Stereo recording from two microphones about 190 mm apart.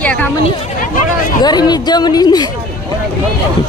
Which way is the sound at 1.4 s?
20° left (ahead or behind).